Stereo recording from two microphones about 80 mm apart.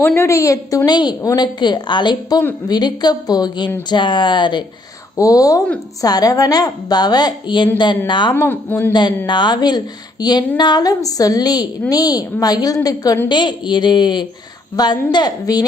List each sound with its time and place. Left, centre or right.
0.2 s a woman's voice: left
0.9 s a woman's voice: left
5.1 s a woman's voice: left
8.3 s speech: left
8.9 s a woman's voice: left
13.2 s a woman's voice: left
14.8 s a woman's voice: left